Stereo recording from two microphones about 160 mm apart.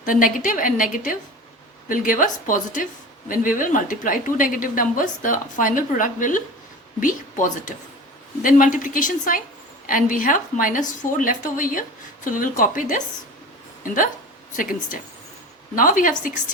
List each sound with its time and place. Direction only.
0.0 s a woman's voice: 60° left (ahead or behind)